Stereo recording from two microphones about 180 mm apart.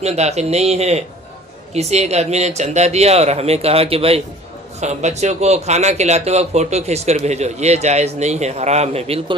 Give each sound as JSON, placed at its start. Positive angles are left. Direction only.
{"t": 0.0, "sound": "a man's voice", "side_deg": -35}